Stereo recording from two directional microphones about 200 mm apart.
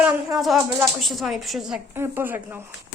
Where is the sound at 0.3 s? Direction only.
Centre (ahead or behind).